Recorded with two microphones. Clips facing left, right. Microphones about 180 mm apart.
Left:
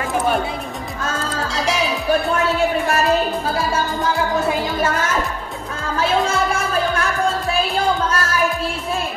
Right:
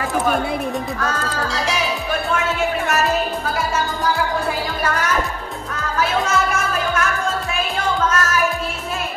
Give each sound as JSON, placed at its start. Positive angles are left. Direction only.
{"t": 1.5, "sound": "music", "side_deg": 0}
{"t": 3.5, "sound": "music", "side_deg": 30}
{"t": 5.9, "sound": "music", "side_deg": 30}
{"t": 8.1, "sound": "music", "side_deg": 30}